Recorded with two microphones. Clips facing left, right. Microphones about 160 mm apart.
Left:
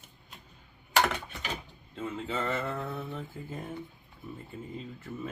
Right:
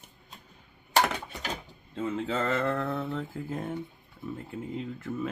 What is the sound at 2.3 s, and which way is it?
Speech, 90° right.